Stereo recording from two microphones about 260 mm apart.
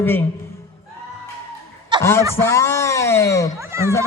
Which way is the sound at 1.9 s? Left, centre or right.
Centre.